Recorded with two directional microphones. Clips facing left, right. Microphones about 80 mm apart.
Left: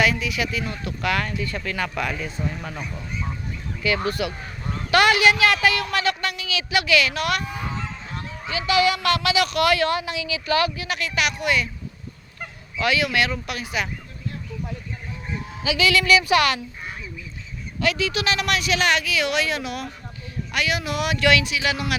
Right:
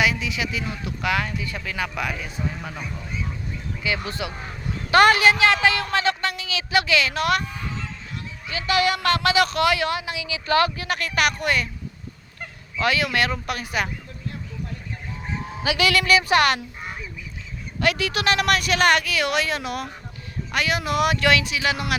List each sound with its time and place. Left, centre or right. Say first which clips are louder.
0.0 s speech: left 1 dB; centre
3.8 s a woman's voice: left 4 dB; centre
4.9 s speech: right 2 dB; right
7.4 s honk: left 3 dB; centre
8.5 s speech: left 1 dB; right
9.6 s a woman's voice: left 1 dB; centre
10.4 s speech: right 2 dB; right
12.8 s speech: even; right
15.6 s speech: left 1 dB; right
17.7 s speech: even; right